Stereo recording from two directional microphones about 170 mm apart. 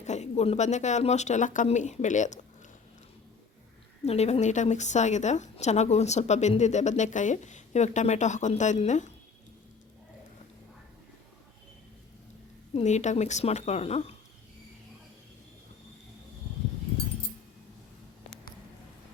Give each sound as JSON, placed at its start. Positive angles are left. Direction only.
{"t": 0.0, "sound": "a woman's voice", "side_deg": 40}
{"t": 4.0, "sound": "a woman's voice", "side_deg": 40}
{"t": 12.7, "sound": "a woman's voice", "side_deg": 45}